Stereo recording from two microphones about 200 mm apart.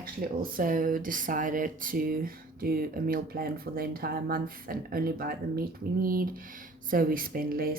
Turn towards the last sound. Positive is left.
turn(degrees=-45)  # may be behind; listen again after turning